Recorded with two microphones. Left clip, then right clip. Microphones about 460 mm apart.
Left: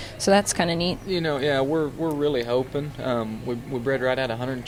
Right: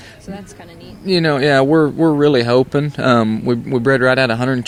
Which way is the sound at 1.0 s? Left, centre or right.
Right.